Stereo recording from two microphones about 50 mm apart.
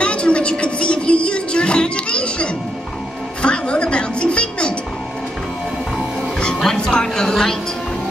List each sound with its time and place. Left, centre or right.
0.0 s music: left
6.4 s music: centre